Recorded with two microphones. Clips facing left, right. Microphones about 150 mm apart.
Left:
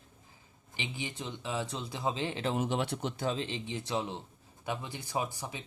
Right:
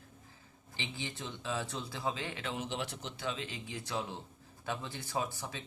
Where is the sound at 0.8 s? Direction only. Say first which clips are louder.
Left 2 dB; 15° left (ahead or behind); by 2.6 s 30° left (ahead or behind).